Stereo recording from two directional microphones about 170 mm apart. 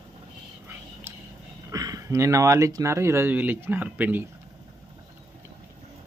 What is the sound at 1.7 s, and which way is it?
Speech, 20° right (ahead or behind).